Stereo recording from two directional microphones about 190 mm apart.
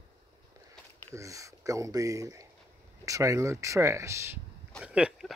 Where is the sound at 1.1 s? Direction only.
15° right (ahead or behind).